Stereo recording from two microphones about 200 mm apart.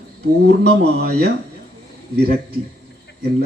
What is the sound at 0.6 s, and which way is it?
Speech, 55° right (ahead or behind).